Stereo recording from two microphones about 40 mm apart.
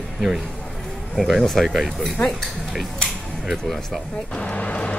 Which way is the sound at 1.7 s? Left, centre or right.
Centre.